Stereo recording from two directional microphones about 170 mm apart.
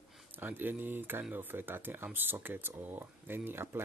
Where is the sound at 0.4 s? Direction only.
10° right (ahead or behind).